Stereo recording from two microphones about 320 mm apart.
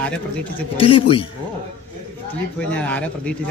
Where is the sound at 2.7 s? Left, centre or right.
Centre.